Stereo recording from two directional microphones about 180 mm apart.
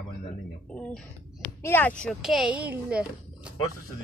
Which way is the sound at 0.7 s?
5° left (ahead or behind).